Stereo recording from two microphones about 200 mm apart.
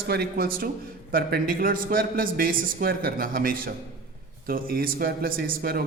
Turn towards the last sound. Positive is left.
turn(degrees=-50)  # may be behind; listen again after turning